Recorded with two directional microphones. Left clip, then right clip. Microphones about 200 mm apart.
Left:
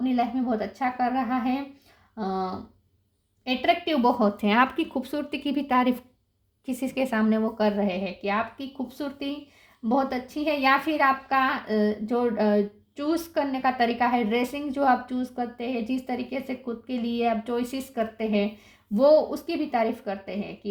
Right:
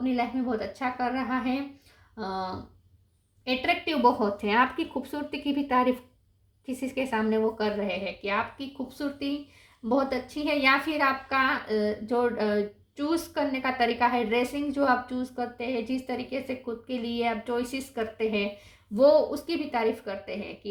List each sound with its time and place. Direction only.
0.1 s a woman's voice: 40° left (ahead or behind)